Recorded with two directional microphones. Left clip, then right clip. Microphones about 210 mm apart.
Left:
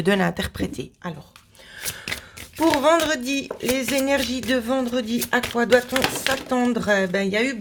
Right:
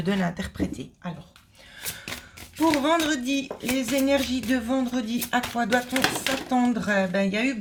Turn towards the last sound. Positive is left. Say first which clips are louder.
# left 3 dB
turn(degrees=50)  # may be behind; listen again after turning